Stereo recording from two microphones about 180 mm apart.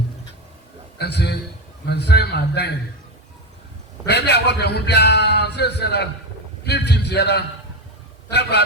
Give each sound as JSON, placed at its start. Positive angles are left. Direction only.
{"t": 0.9, "sound": "a man's voice", "side_deg": 65}
{"t": 4.0, "sound": "a man's voice", "side_deg": 70}